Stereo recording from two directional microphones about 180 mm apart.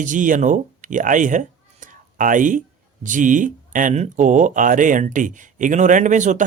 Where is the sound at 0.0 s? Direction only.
45° right (ahead or behind).